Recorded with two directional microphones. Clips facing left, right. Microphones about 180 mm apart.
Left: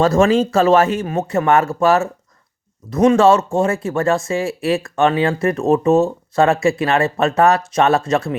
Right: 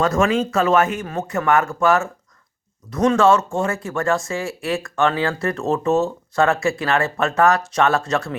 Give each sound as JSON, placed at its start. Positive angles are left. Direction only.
{"t": 0.0, "sound": "speech", "side_deg": 30}